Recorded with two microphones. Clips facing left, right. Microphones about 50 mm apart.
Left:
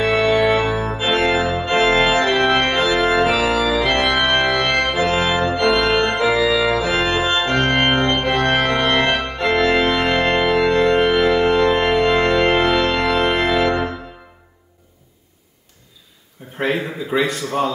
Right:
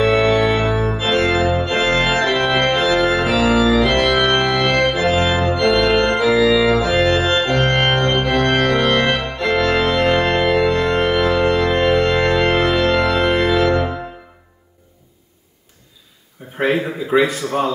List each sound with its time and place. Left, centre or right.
0.0 s organ: centre
1.0 s organ: centre
1.3 s organ: centre
3.0 s organ: centre
3.4 s organ: centre
16.5 s a sound: centre